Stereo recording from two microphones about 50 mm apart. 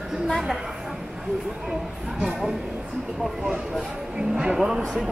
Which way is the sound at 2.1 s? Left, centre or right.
Centre.